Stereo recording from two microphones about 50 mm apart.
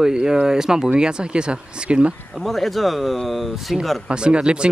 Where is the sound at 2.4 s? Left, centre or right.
Centre.